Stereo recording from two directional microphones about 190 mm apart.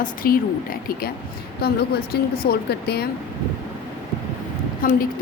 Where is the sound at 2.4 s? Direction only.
55° left (ahead or behind).